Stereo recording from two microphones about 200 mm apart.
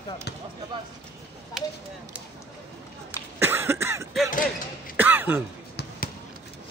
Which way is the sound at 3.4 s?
10° right (ahead or behind).